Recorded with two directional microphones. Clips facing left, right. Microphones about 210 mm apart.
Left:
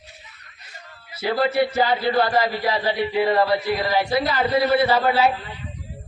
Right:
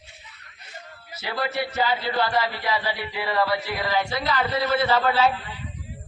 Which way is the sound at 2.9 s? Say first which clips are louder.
Left 8 dB; 20° left (ahead or behind).